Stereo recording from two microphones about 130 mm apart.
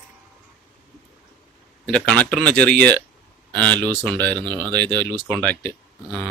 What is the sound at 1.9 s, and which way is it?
Speech, 5° left (ahead or behind).